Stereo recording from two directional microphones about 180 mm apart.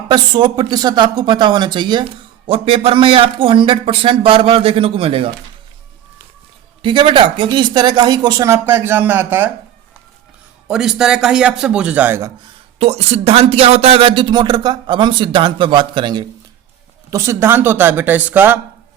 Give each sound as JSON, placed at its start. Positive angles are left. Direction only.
{"t": 0.1, "sound": "speech", "side_deg": -25}
{"t": 6.8, "sound": "speech", "side_deg": -25}
{"t": 10.7, "sound": "a man's voice", "side_deg": -5}
{"t": 12.8, "sound": "speech", "side_deg": -35}
{"t": 17.1, "sound": "speech", "side_deg": -15}